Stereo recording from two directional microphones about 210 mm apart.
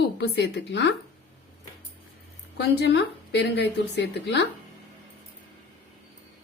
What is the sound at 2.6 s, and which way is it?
A woman's voice, 55° left (ahead or behind).